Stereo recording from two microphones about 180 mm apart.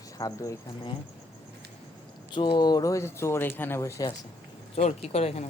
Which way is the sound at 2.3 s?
25° left (ahead or behind).